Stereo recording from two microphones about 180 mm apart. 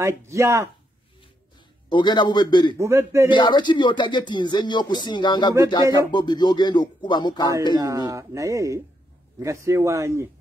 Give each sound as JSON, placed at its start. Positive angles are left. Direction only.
{"t": 0.3, "sound": "speech", "side_deg": -15}
{"t": 1.9, "sound": "speech", "side_deg": 25}
{"t": 2.8, "sound": "speech", "side_deg": -15}
{"t": 3.3, "sound": "speech", "side_deg": 25}
{"t": 7.7, "sound": "speech", "side_deg": -20}